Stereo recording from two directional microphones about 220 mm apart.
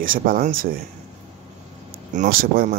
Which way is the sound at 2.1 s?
35° right (ahead or behind).